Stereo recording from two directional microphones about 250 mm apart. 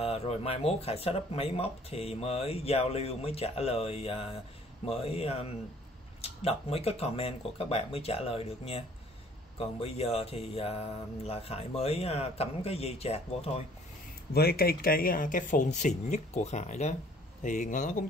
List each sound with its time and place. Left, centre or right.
0.0 s speech: left
14.3 s speech: left